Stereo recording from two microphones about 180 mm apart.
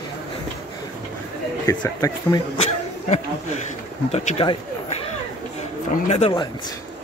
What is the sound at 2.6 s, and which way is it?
Speech, 35° left (ahead or behind).